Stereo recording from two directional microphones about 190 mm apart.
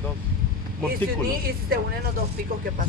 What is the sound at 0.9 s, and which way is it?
Speech, 50° right (ahead or behind).